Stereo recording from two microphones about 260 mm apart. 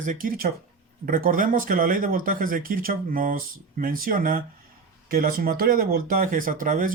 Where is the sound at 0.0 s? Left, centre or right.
Right.